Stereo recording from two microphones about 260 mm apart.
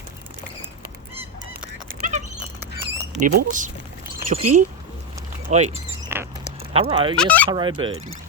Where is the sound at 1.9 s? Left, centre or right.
Right.